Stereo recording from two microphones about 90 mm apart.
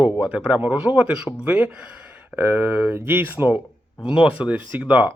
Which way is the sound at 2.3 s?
25° right (ahead or behind).